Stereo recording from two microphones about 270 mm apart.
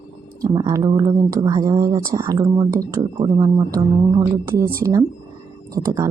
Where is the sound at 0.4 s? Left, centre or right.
Centre.